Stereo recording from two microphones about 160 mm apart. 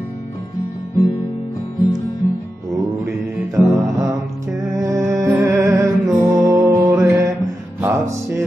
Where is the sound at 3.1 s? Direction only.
20° right (ahead or behind).